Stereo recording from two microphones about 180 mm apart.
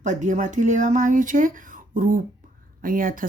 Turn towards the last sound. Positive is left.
turn(degrees=-50)  # may be behind; listen again after turning